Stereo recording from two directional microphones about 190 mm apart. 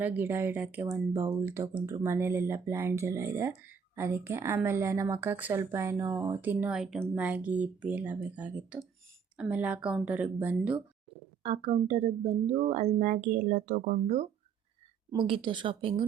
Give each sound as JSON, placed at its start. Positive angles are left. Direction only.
{"t": 0.0, "sound": "a woman's voice", "side_deg": -10}
{"t": 11.4, "sound": "speech", "side_deg": -30}
{"t": 15.1, "sound": "speech", "side_deg": -25}